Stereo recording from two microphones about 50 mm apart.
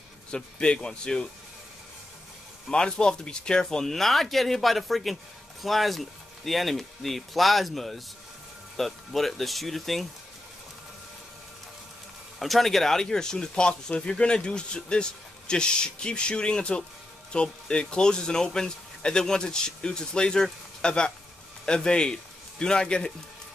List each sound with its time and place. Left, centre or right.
0.3 s speech: centre
2.7 s speech: centre
12.4 s a man's voice: centre